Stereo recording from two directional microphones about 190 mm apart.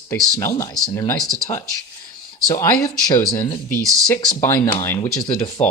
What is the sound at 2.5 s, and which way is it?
Speech, 15° left (ahead or behind).